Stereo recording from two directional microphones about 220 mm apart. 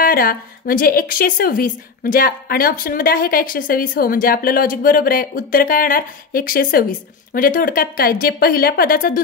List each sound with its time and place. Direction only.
0.0 s a woman's voice: 40° left (ahead or behind)